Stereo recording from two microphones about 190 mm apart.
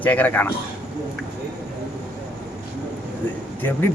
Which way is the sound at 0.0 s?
10° left (ahead or behind).